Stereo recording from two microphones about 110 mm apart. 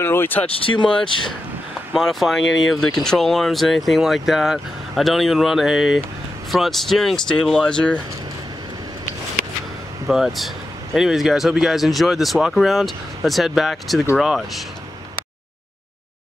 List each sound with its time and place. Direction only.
0.0 s speech: 20° left (ahead or behind)
0.6 s speech: 50° left (ahead or behind)
2.0 s speech: centre (ahead or behind)
10.0 s speech: centre (ahead or behind)